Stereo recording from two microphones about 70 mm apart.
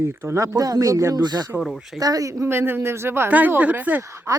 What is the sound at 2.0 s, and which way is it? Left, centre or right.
Speech, right.